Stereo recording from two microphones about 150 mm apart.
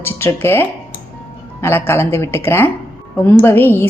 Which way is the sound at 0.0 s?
15° left (ahead or behind).